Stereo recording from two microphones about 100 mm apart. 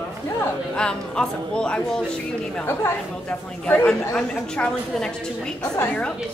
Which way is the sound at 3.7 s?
15° left (ahead or behind).